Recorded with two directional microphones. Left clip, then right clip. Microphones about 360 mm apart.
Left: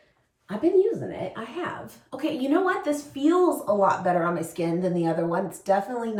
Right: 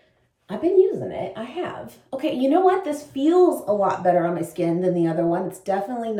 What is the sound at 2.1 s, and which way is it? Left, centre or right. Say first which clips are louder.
Speech: right 5 dB; centre.